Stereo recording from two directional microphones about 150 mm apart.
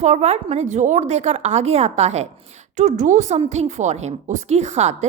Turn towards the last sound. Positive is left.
turn(degrees=-50)  # may be behind; listen again after turning